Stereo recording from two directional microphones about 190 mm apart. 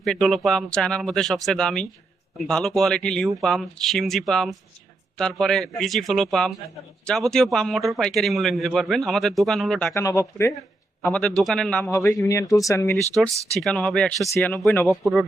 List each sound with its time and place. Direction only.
0.0 s a man's voice: centre (ahead or behind)
9.9 s speech: 15° left (ahead or behind)
11.0 s a man's voice: 5° left (ahead or behind)
11.9 s speech: 15° left (ahead or behind)
13.2 s speech: 15° right (ahead or behind)
13.5 s a man's voice: centre (ahead or behind)